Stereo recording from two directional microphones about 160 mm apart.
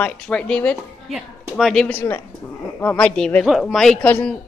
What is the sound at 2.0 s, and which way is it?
A man's voice, 15° left (ahead or behind).